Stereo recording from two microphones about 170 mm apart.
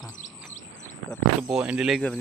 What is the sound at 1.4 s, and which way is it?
Speech, 5° right (ahead or behind).